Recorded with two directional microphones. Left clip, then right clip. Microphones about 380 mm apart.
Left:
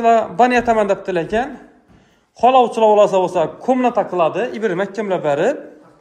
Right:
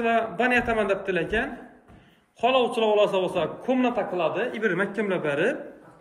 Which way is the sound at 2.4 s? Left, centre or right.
Centre.